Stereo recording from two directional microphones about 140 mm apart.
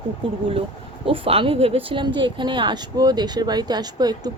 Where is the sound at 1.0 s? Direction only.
40° right (ahead or behind).